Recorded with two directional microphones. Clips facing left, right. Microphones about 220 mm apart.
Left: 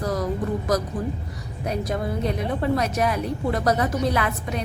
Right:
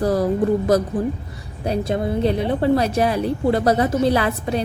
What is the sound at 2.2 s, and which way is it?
A woman's voice, 30° right (ahead or behind).